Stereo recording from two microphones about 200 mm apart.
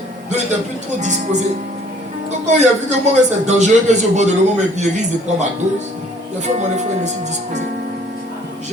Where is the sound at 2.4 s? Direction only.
35° right (ahead or behind).